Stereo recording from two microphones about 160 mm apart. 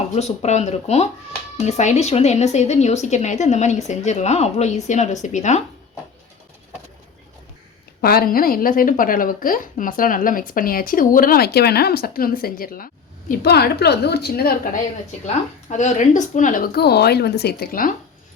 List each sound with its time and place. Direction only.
0.2 s a woman's voice: 45° left (ahead or behind)
8.0 s a woman's voice: 70° left (ahead or behind)
15.7 s a woman's voice: 50° left (ahead or behind)